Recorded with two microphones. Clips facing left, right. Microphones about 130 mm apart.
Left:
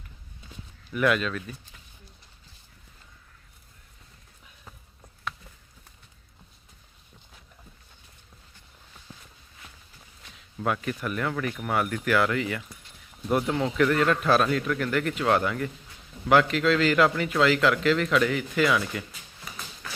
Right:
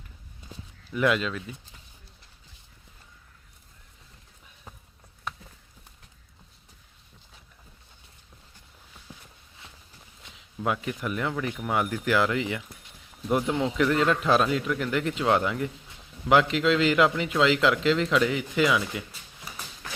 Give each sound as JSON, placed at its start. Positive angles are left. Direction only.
{"t": 0.9, "sound": "speech", "side_deg": -20}
{"t": 9.1, "sound": "a sound", "side_deg": -15}
{"t": 10.2, "sound": "speech", "side_deg": -20}